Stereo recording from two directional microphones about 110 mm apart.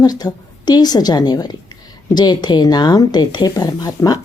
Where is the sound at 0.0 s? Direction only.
35° left (ahead or behind).